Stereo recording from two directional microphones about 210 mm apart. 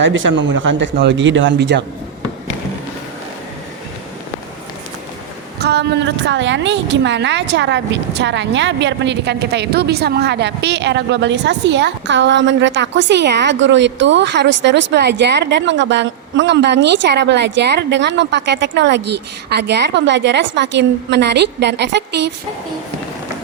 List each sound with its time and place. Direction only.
0.0 s a woman's voice: 65° right (ahead or behind)
5.5 s a woman's voice: 50° right (ahead or behind)